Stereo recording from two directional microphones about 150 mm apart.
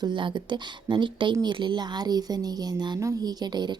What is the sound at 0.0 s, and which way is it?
Speech, 35° right (ahead or behind).